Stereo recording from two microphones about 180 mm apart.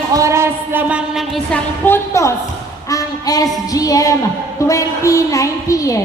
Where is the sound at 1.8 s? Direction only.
15° left (ahead or behind).